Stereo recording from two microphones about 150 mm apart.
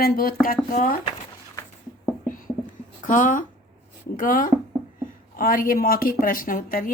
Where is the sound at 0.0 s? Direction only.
85° left.